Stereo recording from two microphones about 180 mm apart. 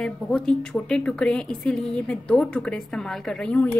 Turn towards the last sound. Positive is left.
turn(degrees=5)  # may be behind; listen again after turning